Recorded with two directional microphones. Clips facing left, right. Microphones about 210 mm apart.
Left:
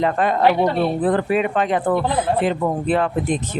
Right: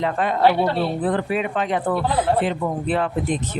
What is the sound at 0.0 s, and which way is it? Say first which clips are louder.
Speech: left 2 dB; 45° left (ahead or behind).